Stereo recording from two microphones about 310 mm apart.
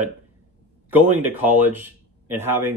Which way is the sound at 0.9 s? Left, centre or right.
Centre.